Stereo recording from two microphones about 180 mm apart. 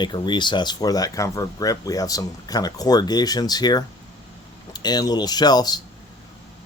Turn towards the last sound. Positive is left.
turn(degrees=20)  # may be behind; listen again after turning